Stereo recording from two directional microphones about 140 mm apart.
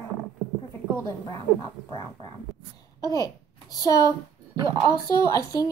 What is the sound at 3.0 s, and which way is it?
A child's voice, 25° left (ahead or behind).